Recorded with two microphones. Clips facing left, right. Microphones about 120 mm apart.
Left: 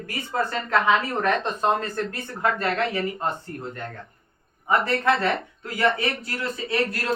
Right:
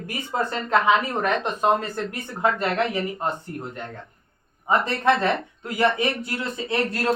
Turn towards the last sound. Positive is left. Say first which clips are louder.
# right 2 dB
turn(degrees=-25)  # may be behind; listen again after turning